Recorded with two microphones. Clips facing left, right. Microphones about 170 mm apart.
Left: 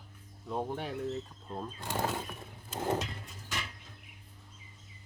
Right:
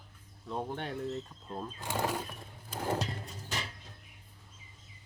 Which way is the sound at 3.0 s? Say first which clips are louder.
Right 3 dB; 35° right (ahead or behind).